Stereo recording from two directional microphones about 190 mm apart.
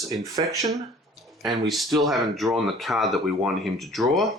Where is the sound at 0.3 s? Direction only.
20° right (ahead or behind).